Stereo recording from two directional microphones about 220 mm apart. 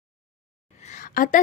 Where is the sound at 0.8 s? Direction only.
35° left (ahead or behind).